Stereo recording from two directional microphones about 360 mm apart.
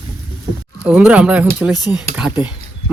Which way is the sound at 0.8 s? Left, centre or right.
Centre.